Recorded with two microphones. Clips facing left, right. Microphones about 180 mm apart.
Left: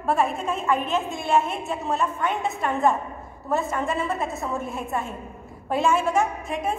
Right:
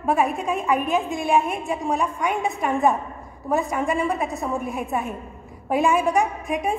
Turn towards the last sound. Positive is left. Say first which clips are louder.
# right 2 dB
turn(degrees=-15)  # may be behind; listen again after turning